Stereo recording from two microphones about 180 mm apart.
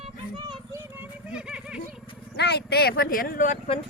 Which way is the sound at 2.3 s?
65° left (ahead or behind).